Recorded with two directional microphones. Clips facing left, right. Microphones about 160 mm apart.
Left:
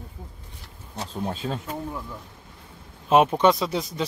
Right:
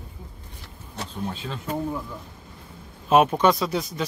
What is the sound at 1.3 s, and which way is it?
Speech, 45° left (ahead or behind).